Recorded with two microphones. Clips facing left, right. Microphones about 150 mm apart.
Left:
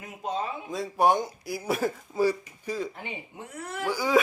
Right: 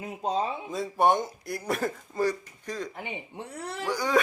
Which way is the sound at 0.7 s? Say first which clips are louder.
Left 1 dB; centre (ahead or behind).